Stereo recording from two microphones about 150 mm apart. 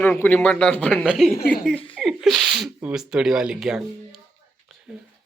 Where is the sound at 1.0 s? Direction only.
5° right (ahead or behind).